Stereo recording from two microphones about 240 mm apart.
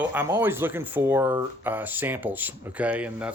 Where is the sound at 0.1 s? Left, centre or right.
Centre.